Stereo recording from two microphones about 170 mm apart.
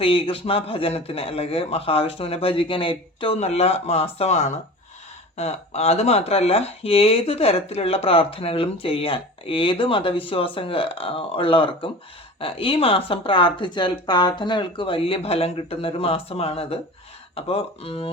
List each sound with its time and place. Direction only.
0.0 s speech: 30° left (ahead or behind)